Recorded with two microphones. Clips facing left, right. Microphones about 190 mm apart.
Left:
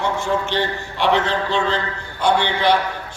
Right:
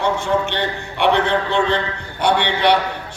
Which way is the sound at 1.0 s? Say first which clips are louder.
Right 2 dB; 60° right (ahead or behind).